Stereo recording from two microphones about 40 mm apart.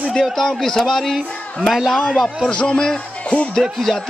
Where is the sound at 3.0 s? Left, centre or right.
Left.